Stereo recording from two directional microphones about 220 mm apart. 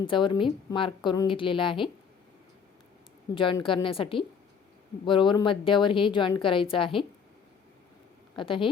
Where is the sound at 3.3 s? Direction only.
25° left (ahead or behind).